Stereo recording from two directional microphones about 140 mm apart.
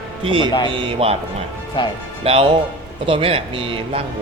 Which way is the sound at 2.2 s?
45° right (ahead or behind).